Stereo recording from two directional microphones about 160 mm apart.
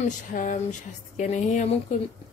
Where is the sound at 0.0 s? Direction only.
55° left (ahead or behind).